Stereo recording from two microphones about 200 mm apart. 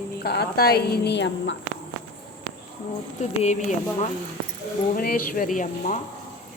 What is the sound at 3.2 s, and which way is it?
Speech, 35° left (ahead or behind).